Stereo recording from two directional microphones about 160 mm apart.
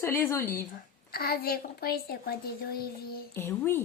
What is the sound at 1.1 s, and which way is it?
A woman's voice, 75° left (ahead or behind).